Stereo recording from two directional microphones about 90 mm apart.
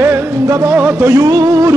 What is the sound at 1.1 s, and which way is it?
Speech, 40° right (ahead or behind).